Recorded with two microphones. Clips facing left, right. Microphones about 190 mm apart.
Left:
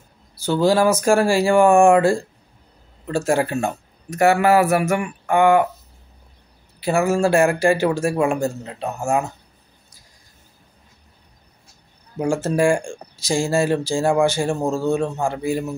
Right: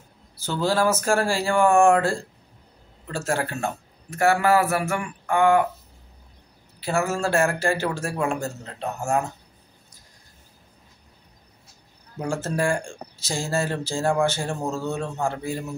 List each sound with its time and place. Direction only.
0.4 s a man's voice: 15° left (ahead or behind)
6.8 s a man's voice: 15° left (ahead or behind)
12.2 s a man's voice: 15° left (ahead or behind)